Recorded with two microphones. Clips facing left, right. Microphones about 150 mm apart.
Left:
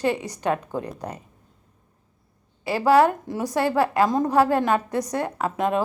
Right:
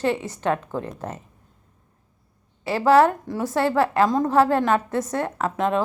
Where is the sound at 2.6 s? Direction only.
10° left (ahead or behind).